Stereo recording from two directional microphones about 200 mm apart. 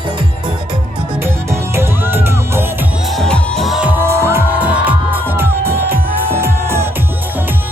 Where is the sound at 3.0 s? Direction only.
Centre (ahead or behind).